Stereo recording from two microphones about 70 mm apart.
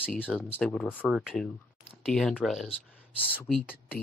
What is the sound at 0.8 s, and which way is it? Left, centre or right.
Speech, left.